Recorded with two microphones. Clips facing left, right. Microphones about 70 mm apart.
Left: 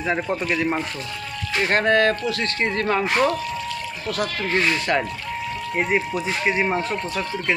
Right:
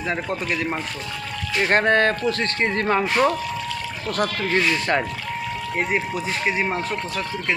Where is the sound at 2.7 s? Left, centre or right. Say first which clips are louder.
Even; centre.